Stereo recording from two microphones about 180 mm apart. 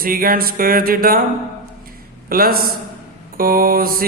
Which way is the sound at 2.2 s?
55° right (ahead or behind).